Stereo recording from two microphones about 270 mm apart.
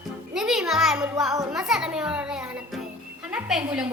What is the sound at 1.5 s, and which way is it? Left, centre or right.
A child's voice, centre.